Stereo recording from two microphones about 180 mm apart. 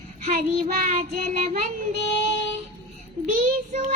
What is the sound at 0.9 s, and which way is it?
Child singing, 40° right (ahead or behind).